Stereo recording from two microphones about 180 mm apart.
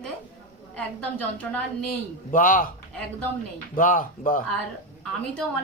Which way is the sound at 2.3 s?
50° left (ahead or behind).